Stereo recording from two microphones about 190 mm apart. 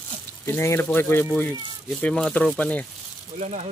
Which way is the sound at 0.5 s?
15° left (ahead or behind).